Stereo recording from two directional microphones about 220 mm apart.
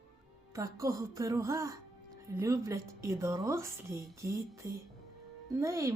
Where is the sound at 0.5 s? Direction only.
15° right (ahead or behind).